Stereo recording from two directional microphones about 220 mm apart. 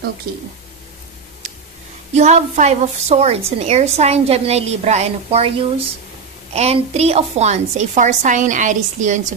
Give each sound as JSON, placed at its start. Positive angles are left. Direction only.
{"t": 2.1, "sound": "a woman's voice", "side_deg": -30}